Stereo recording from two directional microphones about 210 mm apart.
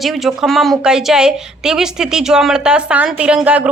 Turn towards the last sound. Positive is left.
turn(degrees=-5)  # may be behind; listen again after turning